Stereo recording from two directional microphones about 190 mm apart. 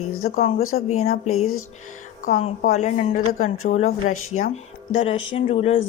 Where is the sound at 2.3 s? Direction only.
40° left (ahead or behind).